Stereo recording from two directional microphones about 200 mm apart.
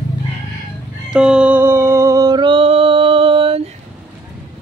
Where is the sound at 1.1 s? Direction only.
5° right (ahead or behind); by 3.7 s 30° right (ahead or behind).